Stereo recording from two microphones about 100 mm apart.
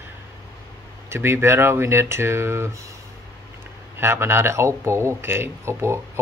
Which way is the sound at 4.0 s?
25° right (ahead or behind).